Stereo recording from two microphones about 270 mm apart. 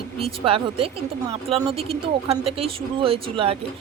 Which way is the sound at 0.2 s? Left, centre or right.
Right.